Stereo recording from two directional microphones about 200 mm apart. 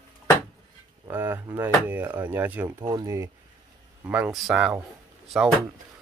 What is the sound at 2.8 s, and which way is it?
Speech, 20° right (ahead or behind).